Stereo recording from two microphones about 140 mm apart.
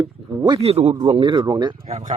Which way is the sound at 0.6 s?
50° right (ahead or behind).